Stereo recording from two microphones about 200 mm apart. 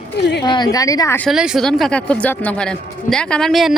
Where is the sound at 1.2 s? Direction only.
5° right (ahead or behind).